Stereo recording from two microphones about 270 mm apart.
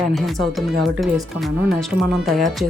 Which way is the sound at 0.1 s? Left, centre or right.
Centre.